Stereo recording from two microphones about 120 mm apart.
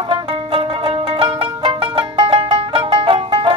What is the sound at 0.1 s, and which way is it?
Music, 50° right (ahead or behind).